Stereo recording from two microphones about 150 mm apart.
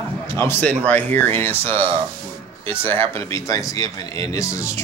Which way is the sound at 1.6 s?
40° right (ahead or behind).